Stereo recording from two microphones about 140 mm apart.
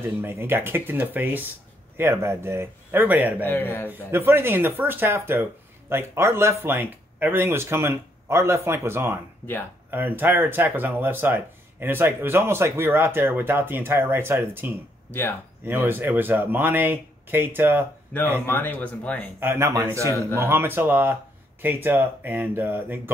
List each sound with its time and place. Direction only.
0.0 s speech: 15° right (ahead or behind)
3.4 s speech: 15° left (ahead or behind)
4.1 s speech: 15° right (ahead or behind)
15.0 s speech: 15° left (ahead or behind)
15.6 s speech: 15° right (ahead or behind)
18.5 s speech: 15° left (ahead or behind)
19.4 s a man's voice: 20° right (ahead or behind)